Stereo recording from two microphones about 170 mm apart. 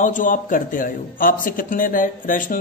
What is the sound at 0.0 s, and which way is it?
A man's voice, 50° left (ahead or behind).